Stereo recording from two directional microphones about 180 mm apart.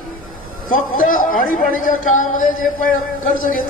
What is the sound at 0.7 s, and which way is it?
Speech, 50° left (ahead or behind).